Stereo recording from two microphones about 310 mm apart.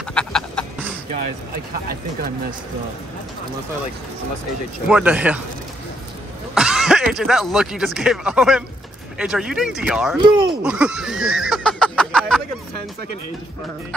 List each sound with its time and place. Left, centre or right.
0.1 s a sound: centre
1.7 s speech: right
4.8 s speech: centre
6.5 s speech: centre
10.2 s speech: centre
10.6 s a sound: centre